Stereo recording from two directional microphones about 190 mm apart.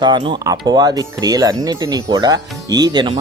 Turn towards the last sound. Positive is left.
turn(degrees=-25)  # may be behind; listen again after turning